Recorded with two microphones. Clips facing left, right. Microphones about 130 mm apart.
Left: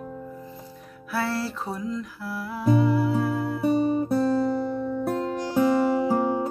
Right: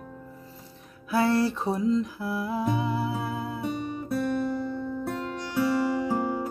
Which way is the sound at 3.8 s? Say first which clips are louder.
Left 6 dB; 30° left (ahead or behind).